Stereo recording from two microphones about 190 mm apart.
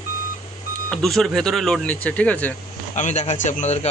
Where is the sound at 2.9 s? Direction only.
40° left (ahead or behind).